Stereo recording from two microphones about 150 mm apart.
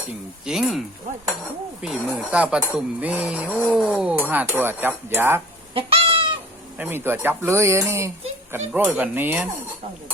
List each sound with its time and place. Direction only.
0.4 s speech: centre (ahead or behind)
1.8 s speech: centre (ahead or behind)
5.7 s cat: 35° right (ahead or behind)
6.7 s speech: 15° right (ahead or behind)